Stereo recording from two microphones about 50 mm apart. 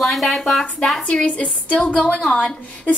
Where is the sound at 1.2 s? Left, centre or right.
Left.